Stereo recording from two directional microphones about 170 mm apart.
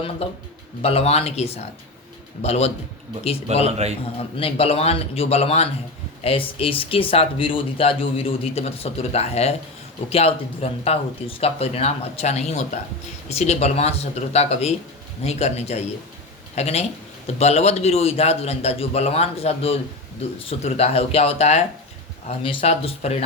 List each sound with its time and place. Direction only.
0.2 s speech: 35° left (ahead or behind)
3.7 s a man's voice: 40° right (ahead or behind)
4.4 s speech: 35° left (ahead or behind)